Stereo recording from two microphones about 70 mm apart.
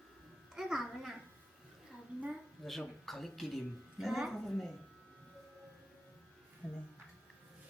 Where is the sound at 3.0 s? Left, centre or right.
Centre.